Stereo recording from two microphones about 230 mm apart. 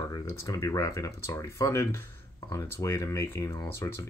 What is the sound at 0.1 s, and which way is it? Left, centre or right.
Speech, centre.